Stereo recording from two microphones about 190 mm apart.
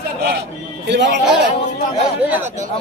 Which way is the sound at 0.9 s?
65° right (ahead or behind).